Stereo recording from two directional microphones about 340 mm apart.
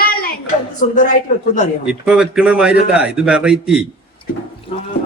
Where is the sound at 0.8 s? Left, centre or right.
Left.